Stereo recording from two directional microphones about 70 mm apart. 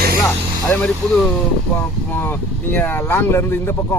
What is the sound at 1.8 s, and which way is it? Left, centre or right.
Speech, left.